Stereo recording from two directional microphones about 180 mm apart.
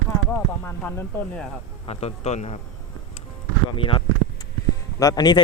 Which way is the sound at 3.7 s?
30° left (ahead or behind).